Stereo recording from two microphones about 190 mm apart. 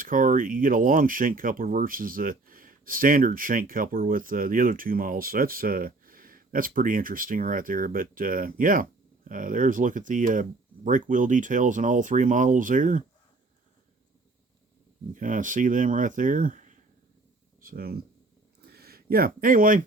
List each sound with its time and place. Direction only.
0.0 s speech: 45° right (ahead or behind)
15.1 s speech: 45° right (ahead or behind)
18.6 s a sound: 55° right (ahead or behind)